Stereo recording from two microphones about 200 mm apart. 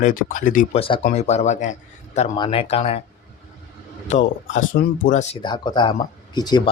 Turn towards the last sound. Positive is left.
turn(degrees=20)  # may be behind; listen again after turning